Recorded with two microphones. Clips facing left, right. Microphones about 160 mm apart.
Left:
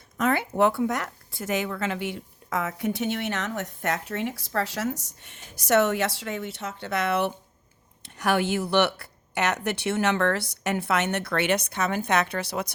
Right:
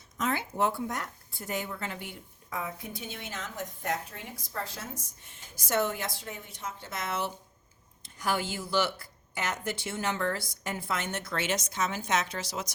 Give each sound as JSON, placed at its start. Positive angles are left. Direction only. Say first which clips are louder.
{"t": 0.2, "sound": "speech", "louder": "left 7 dB", "side_deg": 65}